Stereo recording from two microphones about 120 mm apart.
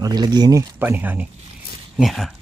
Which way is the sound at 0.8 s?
15° right (ahead or behind).